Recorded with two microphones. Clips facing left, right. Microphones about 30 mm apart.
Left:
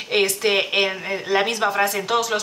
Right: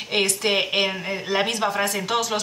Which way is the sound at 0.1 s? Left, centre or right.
Centre.